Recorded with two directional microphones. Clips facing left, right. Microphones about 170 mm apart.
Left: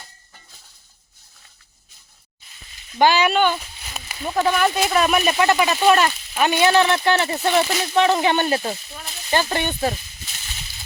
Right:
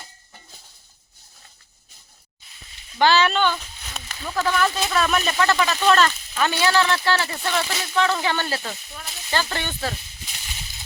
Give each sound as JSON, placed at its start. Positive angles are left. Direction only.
{"t": 3.0, "sound": "speech", "side_deg": 15}
{"t": 4.2, "sound": "speech", "side_deg": 20}